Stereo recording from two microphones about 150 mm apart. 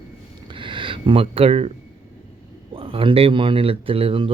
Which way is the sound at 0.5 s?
35° right (ahead or behind).